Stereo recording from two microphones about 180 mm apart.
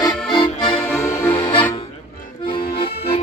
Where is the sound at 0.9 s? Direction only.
15° left (ahead or behind).